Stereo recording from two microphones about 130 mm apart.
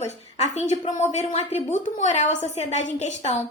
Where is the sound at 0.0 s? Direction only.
60° left (ahead or behind).